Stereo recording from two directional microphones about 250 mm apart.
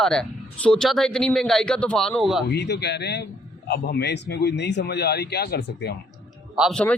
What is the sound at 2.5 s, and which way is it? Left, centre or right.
Speech, left.